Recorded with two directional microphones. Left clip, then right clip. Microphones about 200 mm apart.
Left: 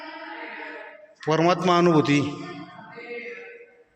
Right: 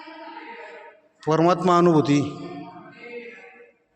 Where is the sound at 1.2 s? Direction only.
20° right (ahead or behind).